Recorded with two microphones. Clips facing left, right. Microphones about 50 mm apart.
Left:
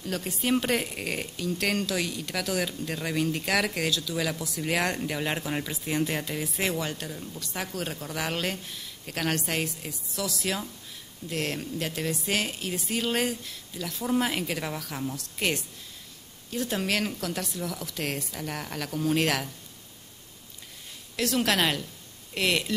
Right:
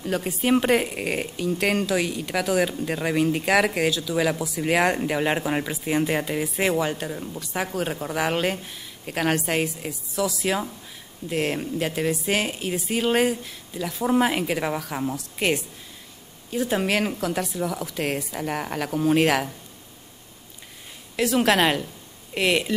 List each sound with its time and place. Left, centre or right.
0.0 s speech: centre
21.2 s speech: centre